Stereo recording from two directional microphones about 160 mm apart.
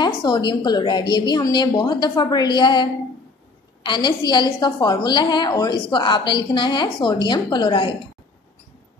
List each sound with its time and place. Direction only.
0.0 s a woman's voice: 30° left (ahead or behind)